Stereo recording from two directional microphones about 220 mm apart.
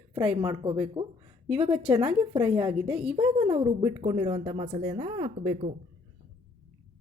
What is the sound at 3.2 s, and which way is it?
Speech, 20° right (ahead or behind).